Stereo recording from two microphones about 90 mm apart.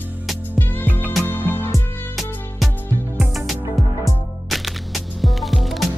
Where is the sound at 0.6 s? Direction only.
20° left (ahead or behind).